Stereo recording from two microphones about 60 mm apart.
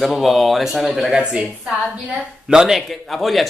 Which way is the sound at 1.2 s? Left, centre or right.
Centre.